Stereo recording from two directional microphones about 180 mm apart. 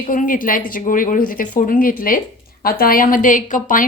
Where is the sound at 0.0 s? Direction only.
50° left (ahead or behind).